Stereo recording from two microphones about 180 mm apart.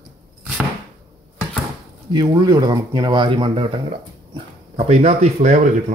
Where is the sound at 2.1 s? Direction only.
25° right (ahead or behind).